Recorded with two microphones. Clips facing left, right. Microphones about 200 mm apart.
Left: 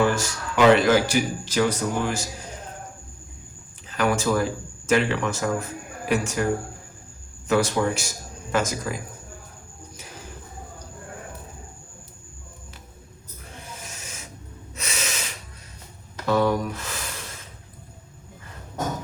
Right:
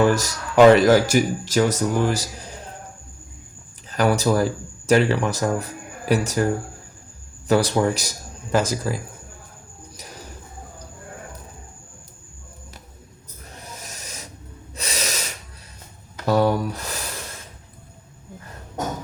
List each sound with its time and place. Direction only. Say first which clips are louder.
0.1 s speech: right 4 dB; 40° right (ahead or behind)
3.8 s speech: right 3 dB; 40° right (ahead or behind)
7.4 s speech: right 3 dB; 35° right (ahead or behind)
13.5 s owl: right 1 dB; 40° right (ahead or behind)
14.8 s snort: right 3 dB; 35° right (ahead or behind)
16.2 s a sound: right 2 dB; 40° right (ahead or behind)